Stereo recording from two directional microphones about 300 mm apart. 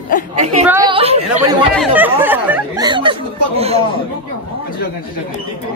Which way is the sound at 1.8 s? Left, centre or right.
Centre.